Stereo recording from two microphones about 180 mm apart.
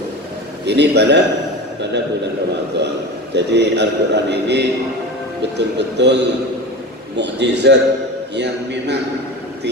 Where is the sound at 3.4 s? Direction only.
70° right (ahead or behind).